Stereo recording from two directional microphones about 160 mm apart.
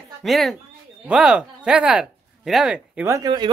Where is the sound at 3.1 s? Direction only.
25° right (ahead or behind).